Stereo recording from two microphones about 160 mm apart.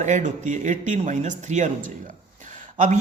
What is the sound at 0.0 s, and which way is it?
A man's voice, 50° right (ahead or behind).